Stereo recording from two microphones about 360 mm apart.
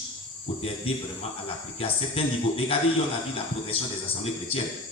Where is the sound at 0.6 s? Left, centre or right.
Centre.